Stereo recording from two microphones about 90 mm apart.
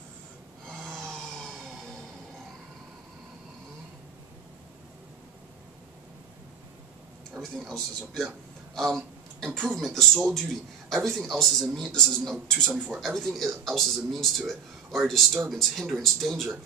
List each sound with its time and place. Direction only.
0.7 s snoring: 5° left (ahead or behind)
1.1 s vehicle: 5° left (ahead or behind)
7.3 s a man's voice: 5° left (ahead or behind)
12.7 s a man's voice: 20° right (ahead or behind)
13.0 s a man's voice: centre (ahead or behind)